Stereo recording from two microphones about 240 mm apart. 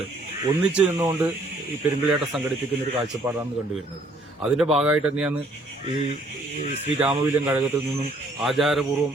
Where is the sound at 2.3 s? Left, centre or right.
Centre.